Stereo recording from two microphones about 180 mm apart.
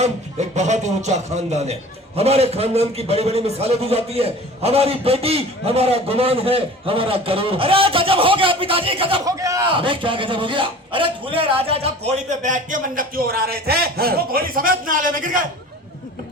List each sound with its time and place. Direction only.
0.0 s a man's voice: 40° right (ahead or behind)
9.2 s a man's voice: 20° right (ahead or behind)
9.7 s a man's voice: 30° right (ahead or behind); by 15.4 s 50° right (ahead or behind)